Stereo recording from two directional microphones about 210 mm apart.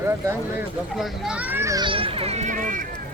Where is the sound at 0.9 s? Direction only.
Centre (ahead or behind); by 2.8 s 40° right (ahead or behind).